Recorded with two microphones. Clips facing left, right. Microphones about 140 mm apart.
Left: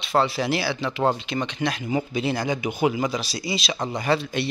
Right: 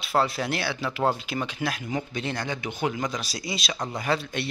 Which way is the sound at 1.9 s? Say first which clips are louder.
Left 6 dB; 10° left (ahead or behind).